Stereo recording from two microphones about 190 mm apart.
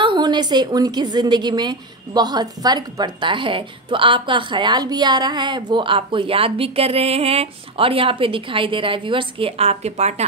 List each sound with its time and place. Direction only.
0.0 s a woman's voice: 25° right (ahead or behind)